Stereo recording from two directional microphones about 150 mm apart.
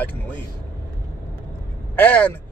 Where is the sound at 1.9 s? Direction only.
10° left (ahead or behind).